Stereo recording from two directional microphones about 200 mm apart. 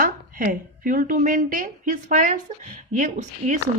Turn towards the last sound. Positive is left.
turn(degrees=-35)  # may be behind; listen again after turning